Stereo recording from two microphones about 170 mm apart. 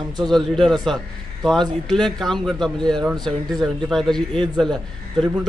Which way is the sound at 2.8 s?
25° right (ahead or behind).